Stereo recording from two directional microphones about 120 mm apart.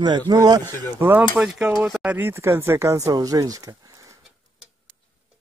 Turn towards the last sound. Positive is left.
turn(degrees=-30)  # may be behind; listen again after turning